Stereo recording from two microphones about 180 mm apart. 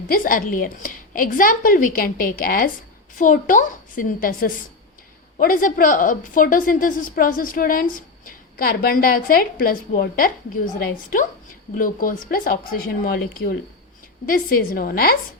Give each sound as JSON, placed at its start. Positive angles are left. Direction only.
{"t": 0.1, "sound": "a woman's voice", "side_deg": 50}